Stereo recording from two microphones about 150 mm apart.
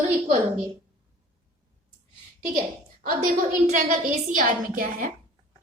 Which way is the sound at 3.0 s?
60° right (ahead or behind).